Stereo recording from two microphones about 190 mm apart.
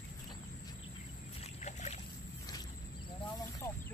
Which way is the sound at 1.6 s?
35° left (ahead or behind).